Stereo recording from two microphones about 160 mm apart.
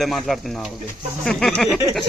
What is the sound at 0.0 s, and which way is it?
Speech, centre (ahead or behind).